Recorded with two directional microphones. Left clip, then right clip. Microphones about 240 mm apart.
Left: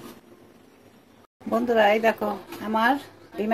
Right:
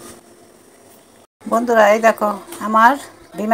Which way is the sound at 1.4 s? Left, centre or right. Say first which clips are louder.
Right 7 dB; centre.